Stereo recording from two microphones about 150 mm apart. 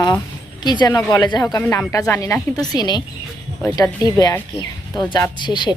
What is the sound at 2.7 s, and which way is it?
Speech, 30° left (ahead or behind).